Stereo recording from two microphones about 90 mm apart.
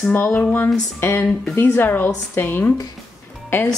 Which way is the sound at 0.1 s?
20° left (ahead or behind).